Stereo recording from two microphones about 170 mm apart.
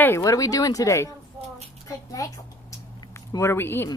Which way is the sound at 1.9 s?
20° left (ahead or behind).